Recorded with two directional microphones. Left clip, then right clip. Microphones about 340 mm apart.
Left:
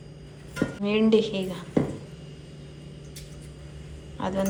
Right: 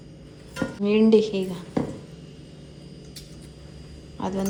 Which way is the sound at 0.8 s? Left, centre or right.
Centre.